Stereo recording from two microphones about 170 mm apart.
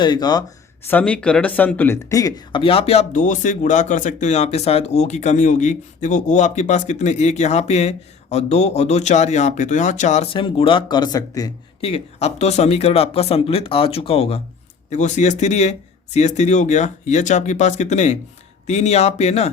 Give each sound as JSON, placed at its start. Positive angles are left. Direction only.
{"t": 0.0, "sound": "speech", "side_deg": 25}
{"t": 0.9, "sound": "speech", "side_deg": 10}
{"t": 10.3, "sound": "speech", "side_deg": 30}
{"t": 11.8, "sound": "speech", "side_deg": 35}